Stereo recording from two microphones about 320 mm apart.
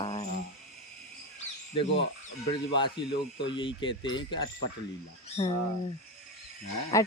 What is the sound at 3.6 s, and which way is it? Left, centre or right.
Speech, centre.